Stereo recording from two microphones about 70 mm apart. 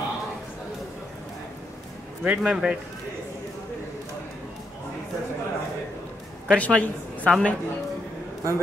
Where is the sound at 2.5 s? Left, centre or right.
Centre.